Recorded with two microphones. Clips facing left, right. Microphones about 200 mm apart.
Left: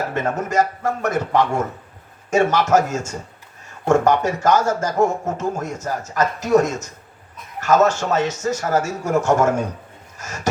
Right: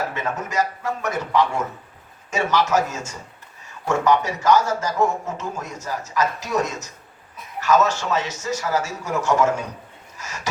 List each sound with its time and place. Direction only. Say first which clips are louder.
0.1 s a man's voice: left 5 dB; 50° left (ahead or behind)